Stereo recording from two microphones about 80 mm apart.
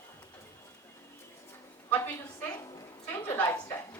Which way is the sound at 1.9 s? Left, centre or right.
Left.